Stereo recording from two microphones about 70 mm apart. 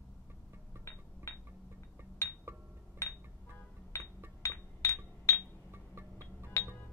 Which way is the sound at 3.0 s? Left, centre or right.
Left.